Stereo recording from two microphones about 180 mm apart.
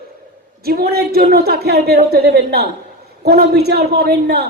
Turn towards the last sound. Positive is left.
turn(degrees=-65)  # may be behind; listen again after turning